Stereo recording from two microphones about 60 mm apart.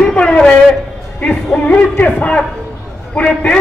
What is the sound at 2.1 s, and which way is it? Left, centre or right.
A man's voice, left.